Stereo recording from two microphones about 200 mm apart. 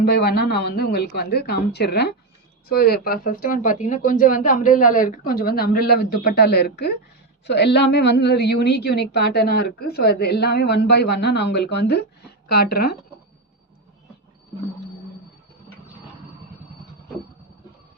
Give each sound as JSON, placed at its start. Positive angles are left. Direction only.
{"t": 0.0, "sound": "a woman's voice", "side_deg": 55}